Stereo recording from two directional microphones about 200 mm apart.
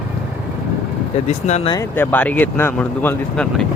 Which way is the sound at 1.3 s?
35° left (ahead or behind).